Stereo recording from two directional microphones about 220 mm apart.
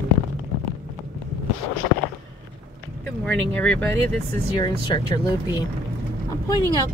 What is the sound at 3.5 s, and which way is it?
Speech, 5° left (ahead or behind).